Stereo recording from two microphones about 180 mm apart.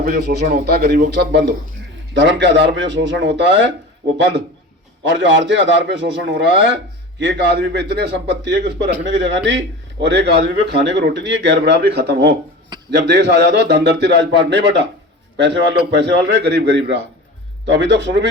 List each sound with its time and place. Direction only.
0.0 s speech: 60° right (ahead or behind)
1.2 s a man's voice: 70° right (ahead or behind)
2.1 s a man's voice: 85° right